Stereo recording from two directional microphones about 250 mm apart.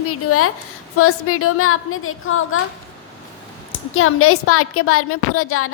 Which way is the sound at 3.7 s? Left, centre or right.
Left.